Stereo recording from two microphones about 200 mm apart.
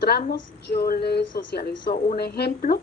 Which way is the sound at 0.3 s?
50° left (ahead or behind).